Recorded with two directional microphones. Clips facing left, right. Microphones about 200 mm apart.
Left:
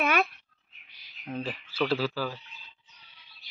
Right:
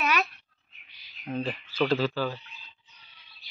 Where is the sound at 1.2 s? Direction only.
5° left (ahead or behind).